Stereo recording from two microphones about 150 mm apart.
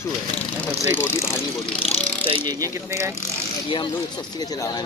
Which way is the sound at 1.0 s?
15° left (ahead or behind).